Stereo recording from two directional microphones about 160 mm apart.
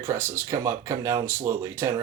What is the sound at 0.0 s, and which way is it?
Speech, 15° right (ahead or behind).